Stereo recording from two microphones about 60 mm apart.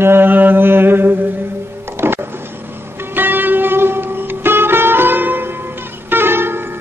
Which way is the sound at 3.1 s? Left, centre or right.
Right.